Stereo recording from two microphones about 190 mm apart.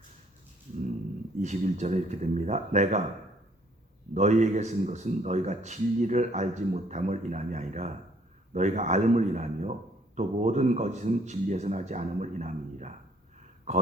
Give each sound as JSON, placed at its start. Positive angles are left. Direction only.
{"t": 1.4, "sound": "a man's voice", "side_deg": -40}
{"t": 4.1, "sound": "a man's voice", "side_deg": -40}